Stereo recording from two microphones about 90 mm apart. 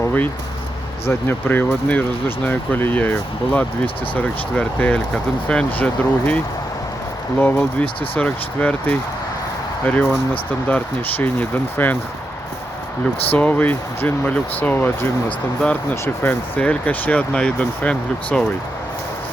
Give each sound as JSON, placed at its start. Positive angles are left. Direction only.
{"t": 1.0, "sound": "speech", "side_deg": 25}
{"t": 13.3, "sound": "speech", "side_deg": 15}